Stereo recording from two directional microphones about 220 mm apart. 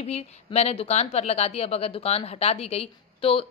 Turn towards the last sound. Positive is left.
turn(degrees=25)  # may be behind; listen again after turning